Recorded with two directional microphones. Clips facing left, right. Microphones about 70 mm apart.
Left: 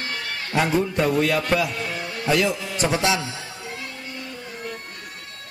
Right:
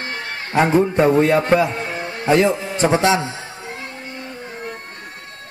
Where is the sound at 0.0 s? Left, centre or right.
Right.